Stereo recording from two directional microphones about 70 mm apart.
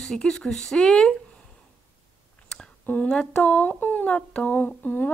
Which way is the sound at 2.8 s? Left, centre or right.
Centre.